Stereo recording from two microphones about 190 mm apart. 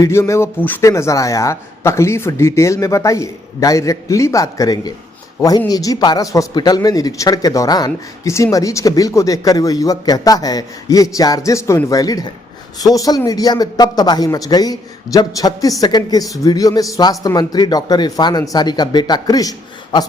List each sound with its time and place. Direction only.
0.0 s a man's voice: 15° left (ahead or behind)